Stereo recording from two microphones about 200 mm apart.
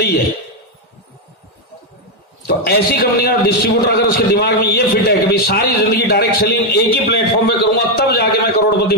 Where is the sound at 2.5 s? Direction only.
50° left (ahead or behind).